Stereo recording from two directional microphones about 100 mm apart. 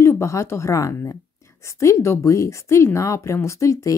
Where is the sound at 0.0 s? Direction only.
30° left (ahead or behind).